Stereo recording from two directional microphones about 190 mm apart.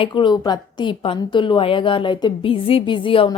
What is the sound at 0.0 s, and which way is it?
A woman's voice, 25° left (ahead or behind).